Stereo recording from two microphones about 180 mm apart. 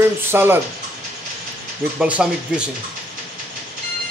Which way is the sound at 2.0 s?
5° right (ahead or behind).